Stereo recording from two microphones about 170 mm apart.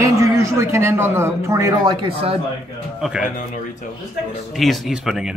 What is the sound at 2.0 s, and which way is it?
Speech, 35° right (ahead or behind).